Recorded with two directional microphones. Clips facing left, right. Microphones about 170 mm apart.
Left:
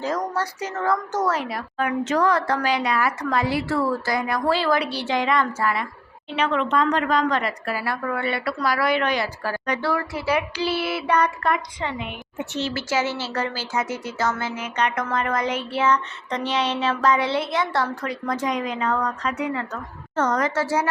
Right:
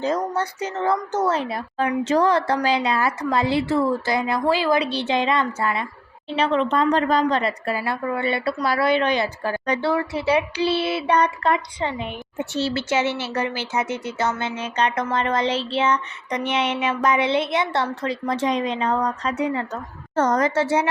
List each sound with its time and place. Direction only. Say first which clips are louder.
0.3 s a woman's voice: right 2 dB; 25° right (ahead or behind)